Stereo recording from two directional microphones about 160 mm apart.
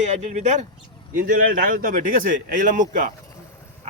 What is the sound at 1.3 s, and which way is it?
Speech, 60° right (ahead or behind).